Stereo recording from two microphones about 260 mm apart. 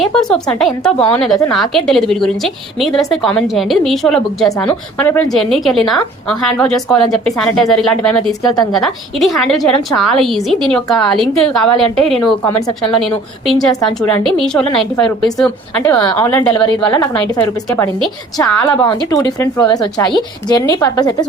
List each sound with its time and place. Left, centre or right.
0.0 s a woman's voice: centre
18.8 s speech: centre